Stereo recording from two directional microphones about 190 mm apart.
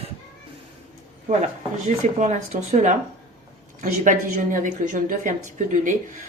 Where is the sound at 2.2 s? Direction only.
40° right (ahead or behind).